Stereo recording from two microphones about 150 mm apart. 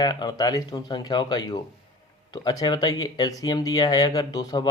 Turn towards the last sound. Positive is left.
turn(degrees=25)  # may be behind; listen again after turning